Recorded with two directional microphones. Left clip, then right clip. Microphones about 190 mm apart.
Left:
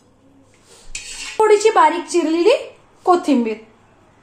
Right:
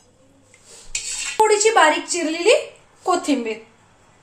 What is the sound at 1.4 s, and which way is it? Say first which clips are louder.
A woman's voice: left 3 dB; 25° left (ahead or behind).